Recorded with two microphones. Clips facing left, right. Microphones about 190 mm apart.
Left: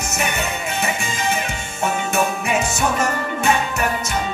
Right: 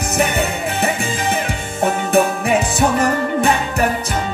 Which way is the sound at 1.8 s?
35° right (ahead or behind).